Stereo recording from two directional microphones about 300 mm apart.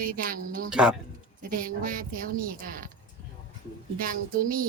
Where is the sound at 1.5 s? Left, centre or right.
Right.